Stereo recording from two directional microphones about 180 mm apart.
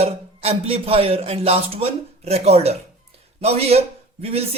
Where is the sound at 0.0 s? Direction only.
35° right (ahead or behind).